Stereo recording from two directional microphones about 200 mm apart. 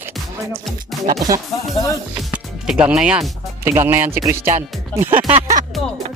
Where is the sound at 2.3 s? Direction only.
5° right (ahead or behind).